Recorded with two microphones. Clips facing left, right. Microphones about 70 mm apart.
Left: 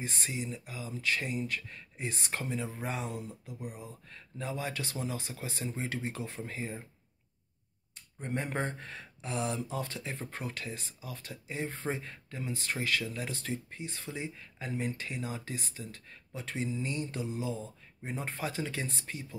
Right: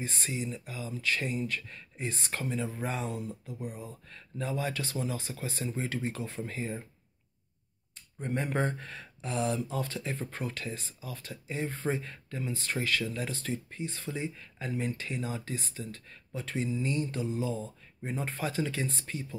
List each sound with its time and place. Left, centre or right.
0.0 s speech: centre
8.2 s speech: centre